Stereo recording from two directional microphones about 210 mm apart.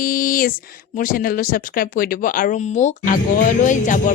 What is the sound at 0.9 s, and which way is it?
Speech, 40° left (ahead or behind).